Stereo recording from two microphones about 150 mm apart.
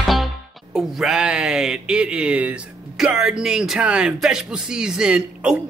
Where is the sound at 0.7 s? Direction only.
Centre (ahead or behind).